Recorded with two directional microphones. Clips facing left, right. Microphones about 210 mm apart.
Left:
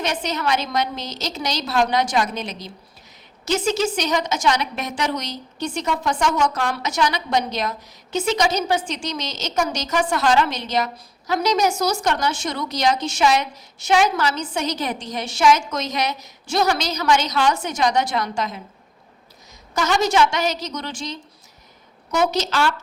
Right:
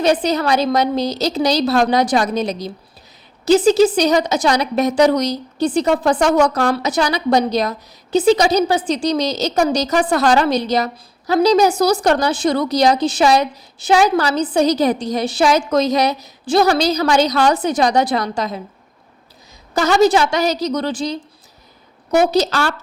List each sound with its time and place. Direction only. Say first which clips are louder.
0.0 s a woman's voice: right 8 dB; 35° right (ahead or behind)
19.7 s a woman's voice: right 6 dB; 35° right (ahead or behind)
22.3 s a woman's voice: right 5 dB; 35° right (ahead or behind)